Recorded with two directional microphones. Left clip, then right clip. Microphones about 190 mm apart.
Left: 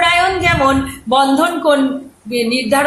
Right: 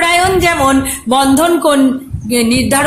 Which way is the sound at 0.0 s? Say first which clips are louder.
Right 2 dB; 60° right (ahead or behind).